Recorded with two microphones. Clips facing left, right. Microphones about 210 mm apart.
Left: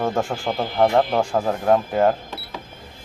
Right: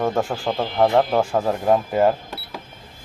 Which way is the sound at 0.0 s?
Centre (ahead or behind).